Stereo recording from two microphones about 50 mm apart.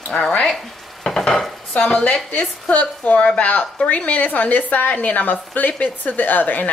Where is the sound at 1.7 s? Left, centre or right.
Left.